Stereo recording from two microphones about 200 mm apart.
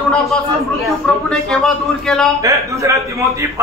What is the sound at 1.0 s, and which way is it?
A man's voice, centre (ahead or behind).